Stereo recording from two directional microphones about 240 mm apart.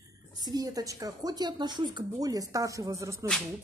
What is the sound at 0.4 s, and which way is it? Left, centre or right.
A woman's voice, centre.